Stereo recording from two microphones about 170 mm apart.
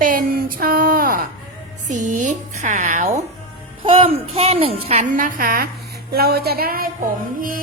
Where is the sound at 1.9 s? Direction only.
45° right (ahead or behind).